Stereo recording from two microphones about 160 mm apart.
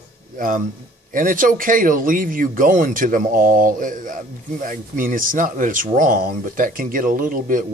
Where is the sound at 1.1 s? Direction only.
60° right (ahead or behind).